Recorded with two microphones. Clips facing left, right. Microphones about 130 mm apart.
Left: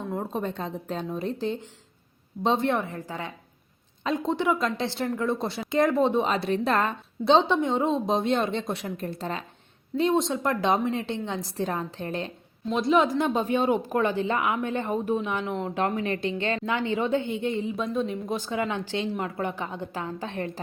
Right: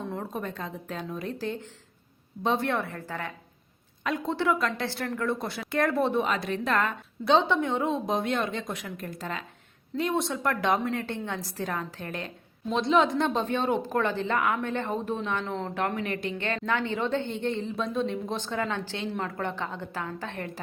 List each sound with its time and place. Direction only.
0.2 s a woman's voice: 25° left (ahead or behind)
12.7 s a woman's voice: centre (ahead or behind); by 20.5 s 20° left (ahead or behind)